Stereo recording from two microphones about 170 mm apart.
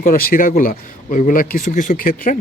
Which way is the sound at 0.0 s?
55° left (ahead or behind).